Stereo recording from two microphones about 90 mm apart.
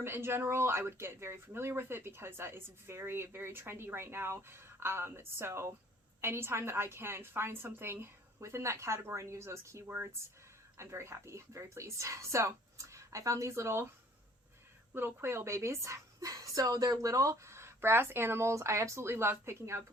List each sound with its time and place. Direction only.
0.0 s a woman's voice: 25° right (ahead or behind)
14.9 s a woman's voice: 25° right (ahead or behind)